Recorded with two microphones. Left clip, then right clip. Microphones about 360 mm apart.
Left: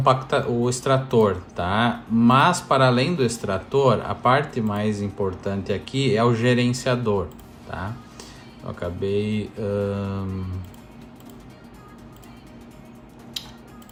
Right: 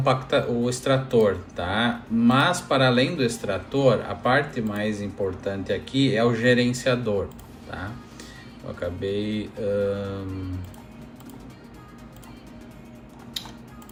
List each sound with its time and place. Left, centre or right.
0.0 s speech: centre
8.8 s speech: centre